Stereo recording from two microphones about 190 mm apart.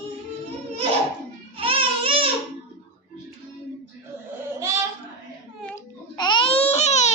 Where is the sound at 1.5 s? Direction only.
30° right (ahead or behind).